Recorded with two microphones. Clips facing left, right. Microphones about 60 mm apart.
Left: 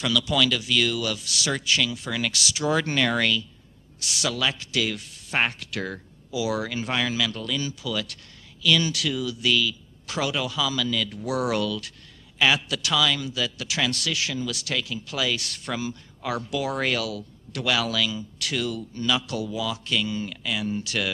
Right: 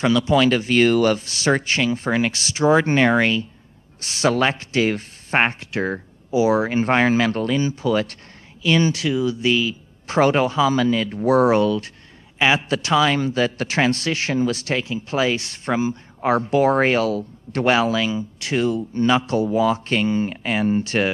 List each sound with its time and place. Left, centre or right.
0.0 s speech: right